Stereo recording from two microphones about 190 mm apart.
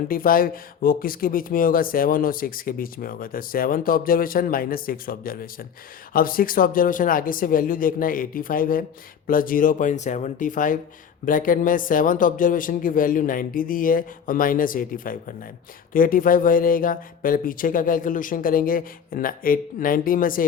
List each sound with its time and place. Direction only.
0.1 s speech: 50° left (ahead or behind)